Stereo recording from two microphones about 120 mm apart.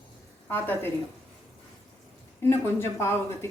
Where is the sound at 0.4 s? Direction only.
15° left (ahead or behind).